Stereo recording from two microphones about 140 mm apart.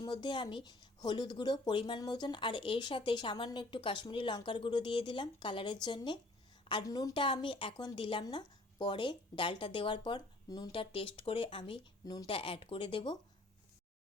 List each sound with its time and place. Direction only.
0.0 s speech: 35° left (ahead or behind)
10.7 s speech: 40° left (ahead or behind)